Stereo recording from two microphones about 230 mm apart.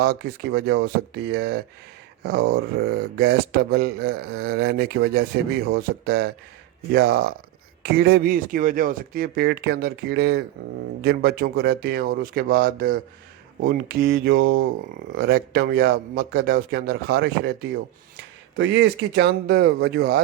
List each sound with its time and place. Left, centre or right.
0.0 s speech: right
18.5 s speech: right